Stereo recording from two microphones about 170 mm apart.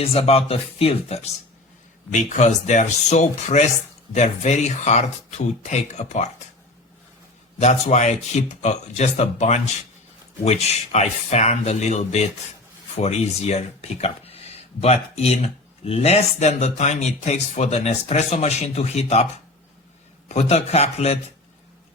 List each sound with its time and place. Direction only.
0.0 s speech: 35° left (ahead or behind)
2.3 s speech: 45° left (ahead or behind)
7.6 s speech: 45° left (ahead or behind)